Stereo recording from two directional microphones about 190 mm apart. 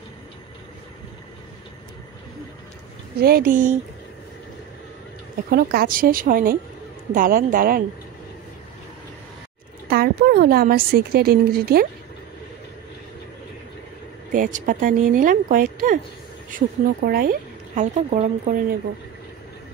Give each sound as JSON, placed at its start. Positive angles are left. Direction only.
{"t": 3.2, "sound": "a woman's voice", "side_deg": -55}
{"t": 5.5, "sound": "a woman's voice", "side_deg": -55}
{"t": 9.8, "sound": "a woman's voice", "side_deg": -55}
{"t": 14.3, "sound": "a woman's voice", "side_deg": -45}
{"t": 17.9, "sound": "speech", "side_deg": -40}